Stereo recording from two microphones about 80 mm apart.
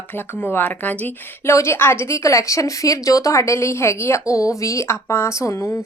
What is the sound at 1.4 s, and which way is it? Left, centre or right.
A woman's voice, left.